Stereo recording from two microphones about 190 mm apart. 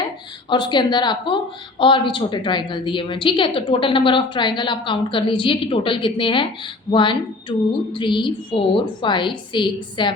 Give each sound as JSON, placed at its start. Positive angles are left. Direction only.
{"t": 0.5, "sound": "a woman's voice", "side_deg": 25}